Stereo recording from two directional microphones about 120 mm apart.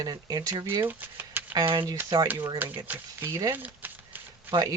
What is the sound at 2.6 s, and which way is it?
Speech, 15° right (ahead or behind).